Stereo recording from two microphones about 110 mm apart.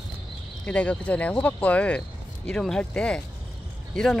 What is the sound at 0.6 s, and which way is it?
Speech, 10° left (ahead or behind).